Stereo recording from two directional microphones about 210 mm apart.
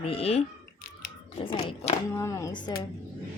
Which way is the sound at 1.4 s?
25° left (ahead or behind).